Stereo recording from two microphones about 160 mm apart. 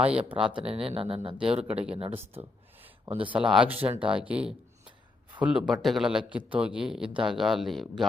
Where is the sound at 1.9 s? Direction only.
40° right (ahead or behind).